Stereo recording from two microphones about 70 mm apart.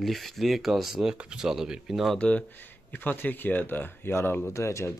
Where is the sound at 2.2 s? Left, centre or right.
Centre.